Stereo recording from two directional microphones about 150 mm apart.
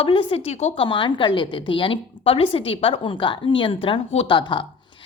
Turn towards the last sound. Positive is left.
turn(degrees=30)  # may be behind; listen again after turning